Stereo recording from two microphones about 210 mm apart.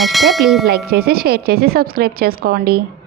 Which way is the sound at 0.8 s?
45° right (ahead or behind).